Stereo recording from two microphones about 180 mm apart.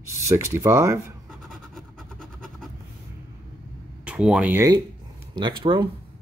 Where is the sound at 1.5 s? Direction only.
Centre (ahead or behind).